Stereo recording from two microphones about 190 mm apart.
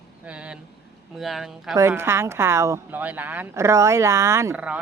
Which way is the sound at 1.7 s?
15° right (ahead or behind).